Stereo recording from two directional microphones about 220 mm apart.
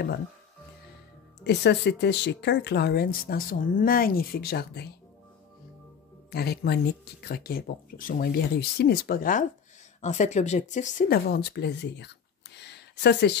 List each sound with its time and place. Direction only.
1.4 s speech: 50° left (ahead or behind)
6.3 s speech: 45° left (ahead or behind)